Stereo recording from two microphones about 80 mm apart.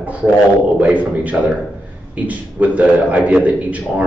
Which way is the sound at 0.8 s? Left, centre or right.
Centre.